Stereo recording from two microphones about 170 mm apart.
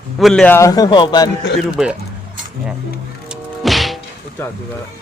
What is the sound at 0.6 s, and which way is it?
Speech, 20° left (ahead or behind).